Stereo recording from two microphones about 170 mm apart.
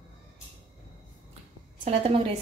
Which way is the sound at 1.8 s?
35° right (ahead or behind).